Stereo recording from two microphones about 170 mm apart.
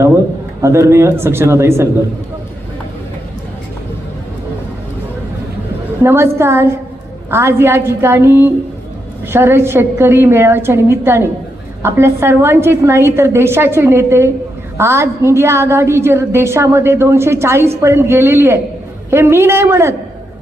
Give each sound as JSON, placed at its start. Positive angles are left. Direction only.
{"t": 0.6, "sound": "a woman's voice", "side_deg": -15}
{"t": 6.0, "sound": "a woman's voice", "side_deg": -15}